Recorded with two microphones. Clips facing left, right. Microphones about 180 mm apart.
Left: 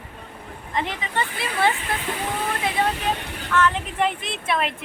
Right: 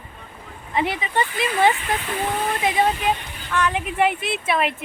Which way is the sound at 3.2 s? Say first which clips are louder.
Left 4 dB; 65° left (ahead or behind).